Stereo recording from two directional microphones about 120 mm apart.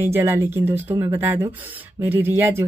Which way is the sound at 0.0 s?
20° right (ahead or behind).